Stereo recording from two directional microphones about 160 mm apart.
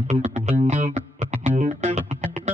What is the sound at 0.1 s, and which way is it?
Music, 45° right (ahead or behind).